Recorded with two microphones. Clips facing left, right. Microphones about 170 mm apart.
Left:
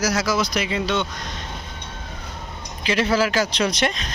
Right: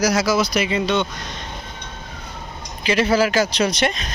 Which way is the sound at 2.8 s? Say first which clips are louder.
Right 3 dB; 5° right (ahead or behind).